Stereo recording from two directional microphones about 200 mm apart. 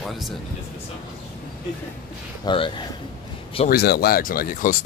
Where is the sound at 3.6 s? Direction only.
50° left (ahead or behind).